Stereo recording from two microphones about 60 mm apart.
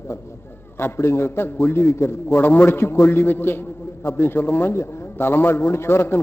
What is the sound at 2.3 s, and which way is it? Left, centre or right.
A man's voice, left.